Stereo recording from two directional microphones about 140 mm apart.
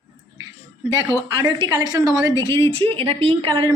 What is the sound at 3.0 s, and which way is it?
Speech, 45° right (ahead or behind).